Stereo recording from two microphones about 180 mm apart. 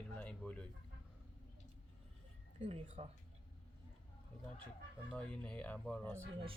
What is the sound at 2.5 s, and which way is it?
Speech, 35° right (ahead or behind).